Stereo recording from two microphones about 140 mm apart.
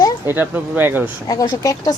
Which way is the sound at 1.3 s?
25° left (ahead or behind).